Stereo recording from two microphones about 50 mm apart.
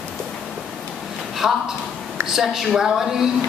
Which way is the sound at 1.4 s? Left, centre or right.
Centre.